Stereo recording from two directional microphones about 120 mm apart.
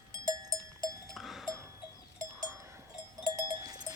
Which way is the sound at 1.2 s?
Centre (ahead or behind).